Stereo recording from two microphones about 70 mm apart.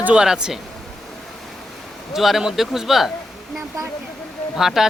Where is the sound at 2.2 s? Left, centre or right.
Centre.